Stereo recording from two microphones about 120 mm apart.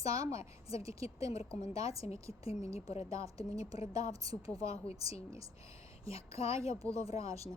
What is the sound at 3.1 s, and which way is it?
Speech, 30° right (ahead or behind).